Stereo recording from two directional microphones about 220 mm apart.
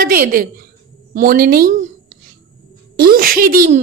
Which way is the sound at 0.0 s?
40° right (ahead or behind).